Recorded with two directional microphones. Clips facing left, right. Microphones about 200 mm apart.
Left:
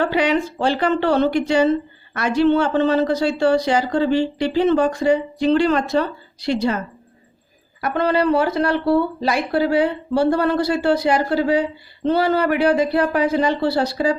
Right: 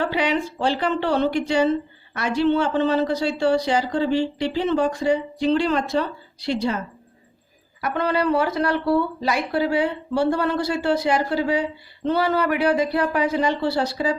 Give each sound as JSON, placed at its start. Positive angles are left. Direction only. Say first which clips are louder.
{"t": 0.2, "sound": "speech", "louder": "left 3 dB", "side_deg": 45}
{"t": 0.9, "sound": "a woman's voice", "louder": "left 5 dB", "side_deg": 65}
{"t": 6.0, "sound": "a woman's voice", "louder": "left 3 dB", "side_deg": 80}
{"t": 7.9, "sound": "speech", "louder": "left 3 dB", "side_deg": 30}